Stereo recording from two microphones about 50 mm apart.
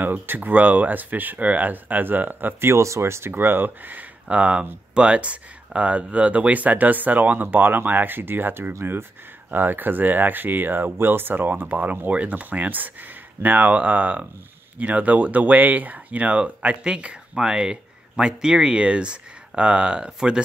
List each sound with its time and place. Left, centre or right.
0.0 s speech: right
2.6 s speech: right; by 20.4 s centre